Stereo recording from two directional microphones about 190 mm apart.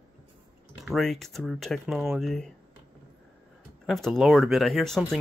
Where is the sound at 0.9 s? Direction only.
Centre (ahead or behind).